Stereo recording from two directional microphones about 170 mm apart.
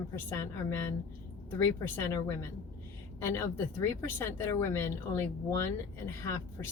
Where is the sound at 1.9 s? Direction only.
15° left (ahead or behind).